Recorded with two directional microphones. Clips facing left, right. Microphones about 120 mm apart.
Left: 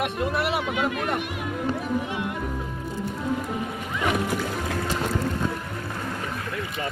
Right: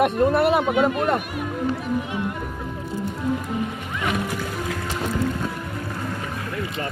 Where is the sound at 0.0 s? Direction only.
45° right (ahead or behind).